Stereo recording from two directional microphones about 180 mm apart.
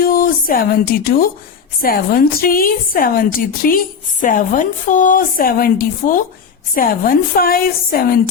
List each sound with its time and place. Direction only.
0.0 s a woman's voice: 55° left (ahead or behind)